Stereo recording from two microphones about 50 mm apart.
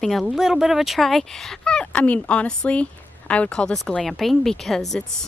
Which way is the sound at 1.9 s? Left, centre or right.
Left.